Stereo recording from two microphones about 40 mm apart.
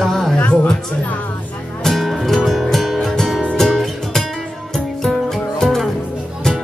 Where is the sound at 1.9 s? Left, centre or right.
Centre.